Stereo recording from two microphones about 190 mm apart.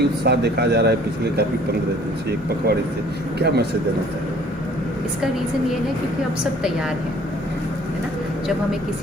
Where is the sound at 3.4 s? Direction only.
55° right (ahead or behind).